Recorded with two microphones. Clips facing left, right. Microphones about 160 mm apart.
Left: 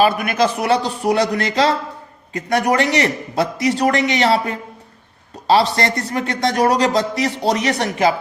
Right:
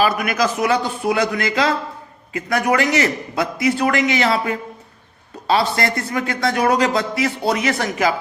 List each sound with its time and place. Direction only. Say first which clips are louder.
0.0 s a man's voice: left 2 dB; 30° left (ahead or behind)